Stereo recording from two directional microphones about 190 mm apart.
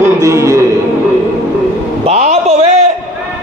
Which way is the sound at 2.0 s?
35° right (ahead or behind).